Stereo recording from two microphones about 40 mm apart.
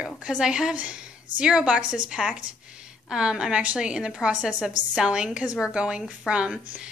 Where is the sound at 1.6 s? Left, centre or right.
Right.